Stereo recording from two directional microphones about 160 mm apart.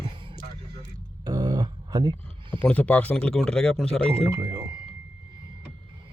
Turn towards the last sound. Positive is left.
turn(degrees=-20)  # may be behind; listen again after turning